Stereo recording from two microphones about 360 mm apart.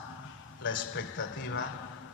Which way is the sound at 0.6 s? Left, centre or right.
Left.